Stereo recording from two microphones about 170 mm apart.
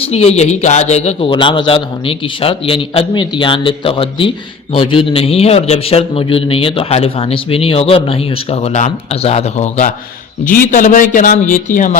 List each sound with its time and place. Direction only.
0.0 s a man's voice: 40° left (ahead or behind)